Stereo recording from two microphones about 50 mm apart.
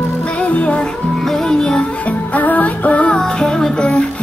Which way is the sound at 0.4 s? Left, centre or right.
Left.